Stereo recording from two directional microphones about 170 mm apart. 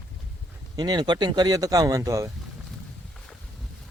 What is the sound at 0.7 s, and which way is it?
Speech, 25° right (ahead or behind).